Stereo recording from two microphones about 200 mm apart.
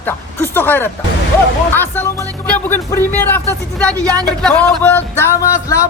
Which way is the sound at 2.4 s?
10° left (ahead or behind).